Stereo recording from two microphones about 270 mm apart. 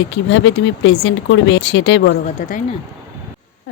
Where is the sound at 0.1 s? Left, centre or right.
Left.